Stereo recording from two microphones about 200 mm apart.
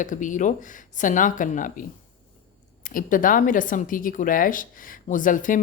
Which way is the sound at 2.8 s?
40° left (ahead or behind).